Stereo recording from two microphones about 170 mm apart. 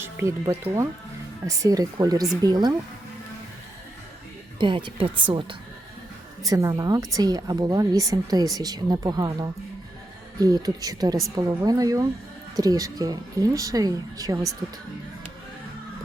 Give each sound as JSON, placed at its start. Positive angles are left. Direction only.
{"t": 0.0, "sound": "a woman's voice", "side_deg": -15}
{"t": 4.5, "sound": "a woman's voice", "side_deg": -30}